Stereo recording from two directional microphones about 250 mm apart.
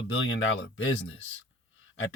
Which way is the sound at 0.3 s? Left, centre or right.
Left.